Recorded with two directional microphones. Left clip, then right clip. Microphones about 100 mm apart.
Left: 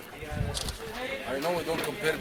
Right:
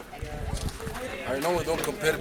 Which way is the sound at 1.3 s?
30° right (ahead or behind).